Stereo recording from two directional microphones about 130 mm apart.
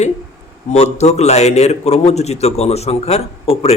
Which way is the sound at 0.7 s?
55° left (ahead or behind).